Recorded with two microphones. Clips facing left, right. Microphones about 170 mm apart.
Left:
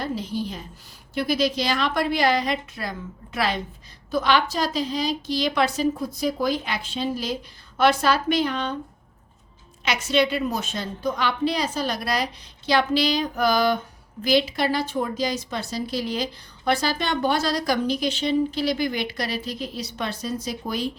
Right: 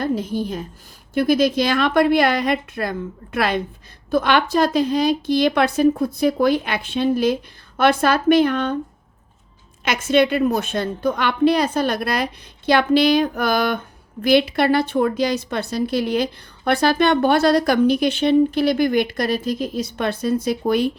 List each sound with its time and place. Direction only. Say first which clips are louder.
0.0 s a woman's voice: right 6 dB; 50° right (ahead or behind)
9.8 s a woman's voice: right 5 dB; 50° right (ahead or behind)